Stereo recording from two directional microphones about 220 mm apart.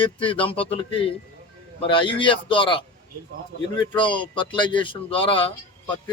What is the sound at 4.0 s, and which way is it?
Speech, 20° left (ahead or behind).